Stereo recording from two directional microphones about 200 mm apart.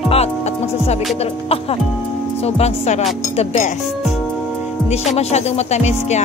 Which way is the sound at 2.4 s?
30° left (ahead or behind).